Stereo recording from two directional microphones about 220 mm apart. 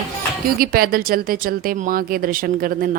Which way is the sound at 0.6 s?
40° right (ahead or behind).